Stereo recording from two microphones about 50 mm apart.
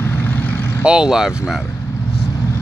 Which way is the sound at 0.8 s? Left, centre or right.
Centre.